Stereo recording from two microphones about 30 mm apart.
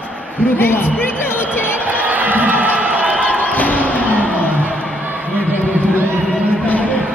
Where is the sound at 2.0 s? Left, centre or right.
Right.